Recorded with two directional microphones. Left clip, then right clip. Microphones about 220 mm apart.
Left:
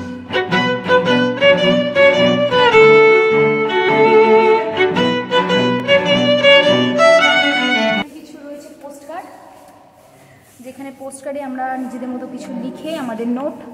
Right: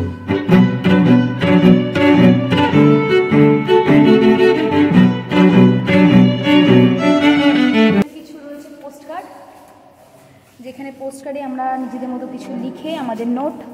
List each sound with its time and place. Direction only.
0.3 s music: centre (ahead or behind)
11.1 s a sound: 5° right (ahead or behind)
12.4 s a woman's voice: centre (ahead or behind)